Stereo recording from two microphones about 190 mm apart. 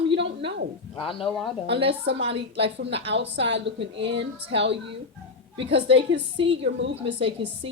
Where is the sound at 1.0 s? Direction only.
30° left (ahead or behind).